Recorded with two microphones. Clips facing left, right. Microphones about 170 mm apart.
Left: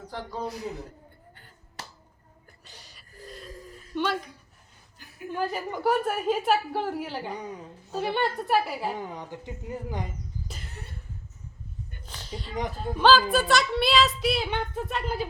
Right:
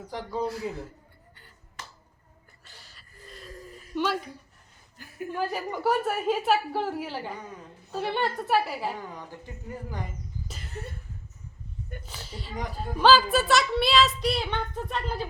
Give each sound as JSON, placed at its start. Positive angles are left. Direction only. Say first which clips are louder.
{"t": 0.1, "sound": "speech", "louder": "right 4 dB", "side_deg": 0}
{"t": 0.7, "sound": "speech", "louder": "right 1 dB", "side_deg": 20}
{"t": 2.6, "sound": "gasp", "louder": "left 2 dB", "side_deg": 15}
{"t": 3.9, "sound": "a sound", "louder": "even", "side_deg": -5}
{"t": 5.3, "sound": "speech", "louder": "left 1 dB", "side_deg": -5}
{"t": 7.3, "sound": "a woman's voice", "louder": "left 4 dB", "side_deg": 15}
{"t": 7.9, "sound": "speech", "louder": "left 1 dB", "side_deg": 0}
{"t": 9.0, "sound": "speech", "louder": "left 3 dB", "side_deg": 20}
{"t": 12.0, "sound": "a sound", "louder": "left 2 dB", "side_deg": -5}
{"t": 13.0, "sound": "speech", "louder": "even", "side_deg": 0}